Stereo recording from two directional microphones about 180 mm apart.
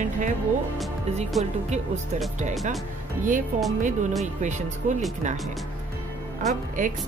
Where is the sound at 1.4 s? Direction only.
35° right (ahead or behind).